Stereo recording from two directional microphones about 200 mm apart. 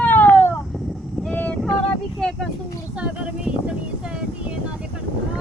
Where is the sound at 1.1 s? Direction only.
5° left (ahead or behind).